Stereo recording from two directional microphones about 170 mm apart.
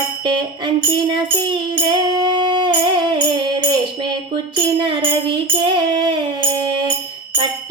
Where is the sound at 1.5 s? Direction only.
25° right (ahead or behind).